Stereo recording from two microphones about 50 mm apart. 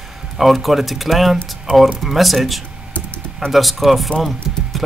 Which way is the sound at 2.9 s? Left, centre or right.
Left.